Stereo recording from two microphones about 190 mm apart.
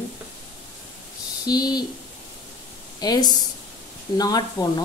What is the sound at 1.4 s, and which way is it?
Speech, 20° left (ahead or behind).